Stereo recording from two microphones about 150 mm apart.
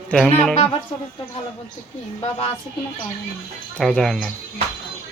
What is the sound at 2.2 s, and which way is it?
Speech, 40° left (ahead or behind).